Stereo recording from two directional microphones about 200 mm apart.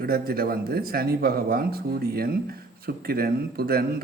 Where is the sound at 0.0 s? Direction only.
50° right (ahead or behind).